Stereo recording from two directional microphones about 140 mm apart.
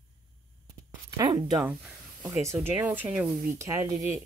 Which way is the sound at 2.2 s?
20° right (ahead or behind).